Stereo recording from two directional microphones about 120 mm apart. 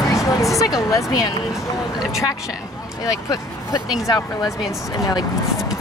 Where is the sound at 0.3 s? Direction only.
25° left (ahead or behind).